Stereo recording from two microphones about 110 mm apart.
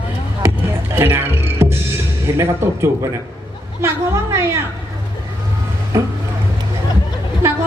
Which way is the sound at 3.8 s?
25° right (ahead or behind).